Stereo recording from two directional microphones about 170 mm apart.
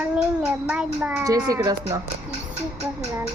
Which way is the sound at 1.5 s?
20° right (ahead or behind).